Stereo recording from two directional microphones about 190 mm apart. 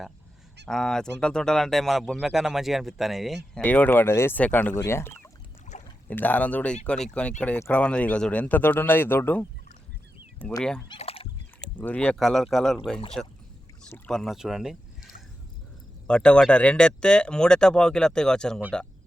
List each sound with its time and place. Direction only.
0.7 s speech: 5° left (ahead or behind)
10.4 s fowl: 5° left (ahead or behind)
10.8 s fowl: 30° left (ahead or behind)
11.6 s speech: 5° left (ahead or behind)
16.0 s speech: 5° left (ahead or behind)